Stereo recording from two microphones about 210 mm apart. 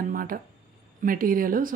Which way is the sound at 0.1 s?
40° right (ahead or behind).